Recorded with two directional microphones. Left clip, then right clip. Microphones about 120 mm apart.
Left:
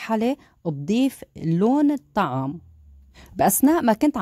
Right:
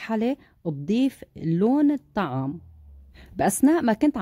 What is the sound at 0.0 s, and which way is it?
Speech, 45° left (ahead or behind).